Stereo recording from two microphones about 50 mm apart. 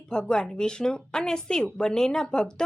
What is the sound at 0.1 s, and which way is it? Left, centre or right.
A woman's voice, centre.